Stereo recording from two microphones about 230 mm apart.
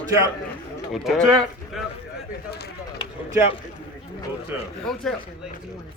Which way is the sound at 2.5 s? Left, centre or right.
Left.